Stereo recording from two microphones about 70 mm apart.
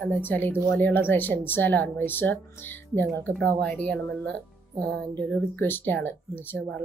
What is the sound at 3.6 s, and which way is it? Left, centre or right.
Speech, centre.